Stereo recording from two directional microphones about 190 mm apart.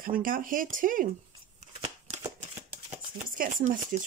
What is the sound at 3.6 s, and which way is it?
Speech, 40° right (ahead or behind).